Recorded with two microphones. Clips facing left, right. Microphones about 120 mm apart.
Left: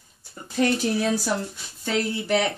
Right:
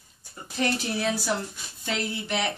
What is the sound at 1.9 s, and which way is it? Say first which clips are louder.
Speech: left 6 dB; 40° left (ahead or behind).